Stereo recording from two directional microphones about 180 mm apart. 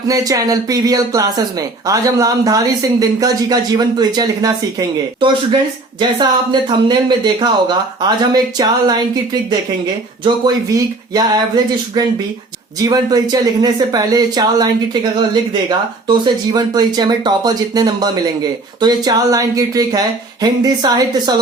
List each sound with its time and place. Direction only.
0.1 s speech: 20° right (ahead or behind)
16.0 s speech: 25° right (ahead or behind)